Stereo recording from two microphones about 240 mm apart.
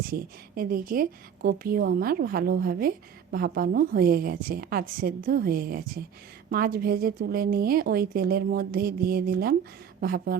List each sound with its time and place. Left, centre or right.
0.1 s speech: right